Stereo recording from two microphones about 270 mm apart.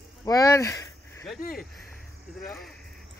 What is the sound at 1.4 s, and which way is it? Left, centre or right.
Speech, left.